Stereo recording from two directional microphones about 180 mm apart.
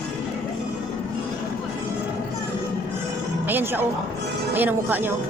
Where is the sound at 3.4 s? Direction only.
10° right (ahead or behind).